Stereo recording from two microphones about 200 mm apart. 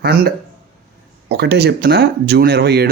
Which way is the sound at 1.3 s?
55° right (ahead or behind).